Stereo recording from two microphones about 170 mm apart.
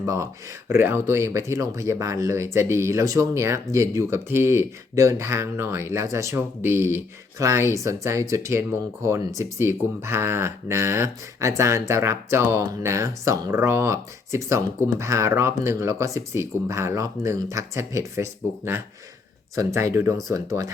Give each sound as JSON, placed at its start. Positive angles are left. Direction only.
{"t": 0.0, "sound": "speech", "side_deg": -20}